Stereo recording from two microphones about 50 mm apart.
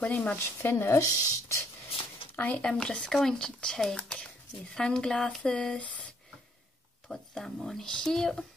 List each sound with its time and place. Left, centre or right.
0.0 s speech: left
0.6 s speech: left
0.9 s speech: left
2.3 s speech: left
2.6 s speech: centre
7.1 s speech: centre